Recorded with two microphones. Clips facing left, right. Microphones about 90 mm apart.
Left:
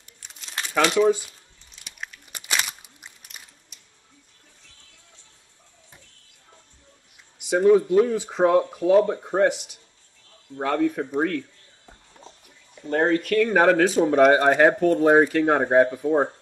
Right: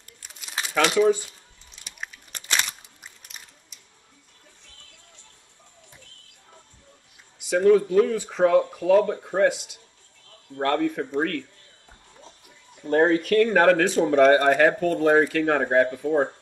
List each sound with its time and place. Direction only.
0.2 s crumpling: 5° right (ahead or behind)
0.8 s speech: 5° left (ahead or behind)
2.3 s a sound: 10° left (ahead or behind)
3.0 s biting: 5° left (ahead or behind)
7.5 s speech: 5° left (ahead or behind)
10.5 s speech: 5° left (ahead or behind)
12.8 s speech: centre (ahead or behind)
14.4 s speech: 15° left (ahead or behind)
14.9 s speech: 5° left (ahead or behind)
15.3 s speech: 15° left (ahead or behind)